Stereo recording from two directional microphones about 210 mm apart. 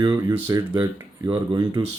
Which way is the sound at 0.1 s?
15° right (ahead or behind).